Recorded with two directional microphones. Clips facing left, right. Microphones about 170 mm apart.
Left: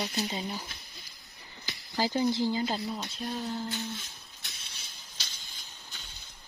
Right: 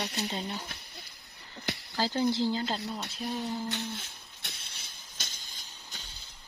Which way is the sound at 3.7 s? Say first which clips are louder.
Even; 60° right (ahead or behind).